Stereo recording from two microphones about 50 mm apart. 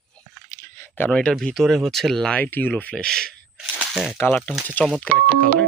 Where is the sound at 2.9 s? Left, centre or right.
Centre.